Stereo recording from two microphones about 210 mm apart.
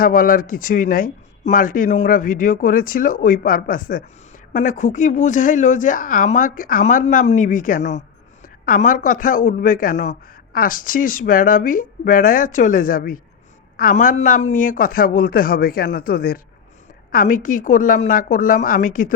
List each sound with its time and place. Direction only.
0.0 s a man's voice: 40° left (ahead or behind)